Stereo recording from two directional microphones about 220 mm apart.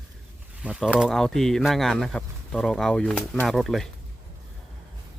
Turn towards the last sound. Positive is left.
turn(degrees=0)  # may be behind; listen again after turning